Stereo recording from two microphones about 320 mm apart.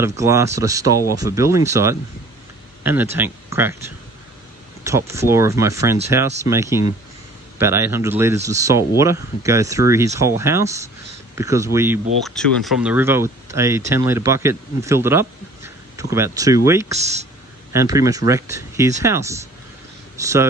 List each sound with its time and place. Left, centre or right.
0.0 s speech: centre
4.8 s speech: centre
16.9 s speech: right
17.7 s speech: centre